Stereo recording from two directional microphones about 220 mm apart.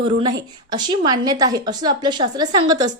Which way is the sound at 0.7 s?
20° right (ahead or behind).